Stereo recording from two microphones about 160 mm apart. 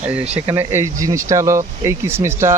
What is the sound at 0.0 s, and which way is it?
Speech, 5° right (ahead or behind).